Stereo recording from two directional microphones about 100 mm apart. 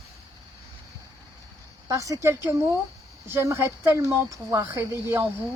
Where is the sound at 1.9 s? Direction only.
35° right (ahead or behind).